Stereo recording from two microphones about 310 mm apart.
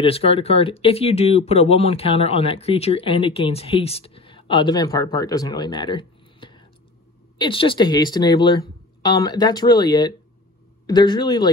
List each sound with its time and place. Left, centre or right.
0.0 s speech: centre